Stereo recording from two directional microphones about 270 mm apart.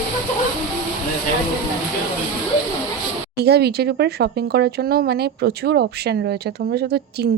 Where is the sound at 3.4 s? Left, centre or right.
Right.